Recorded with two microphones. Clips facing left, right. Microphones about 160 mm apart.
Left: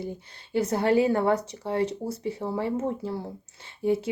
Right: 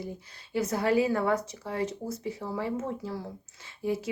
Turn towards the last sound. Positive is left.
turn(degrees=25)  # may be behind; listen again after turning